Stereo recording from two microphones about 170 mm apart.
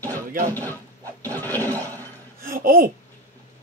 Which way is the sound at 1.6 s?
20° right (ahead or behind).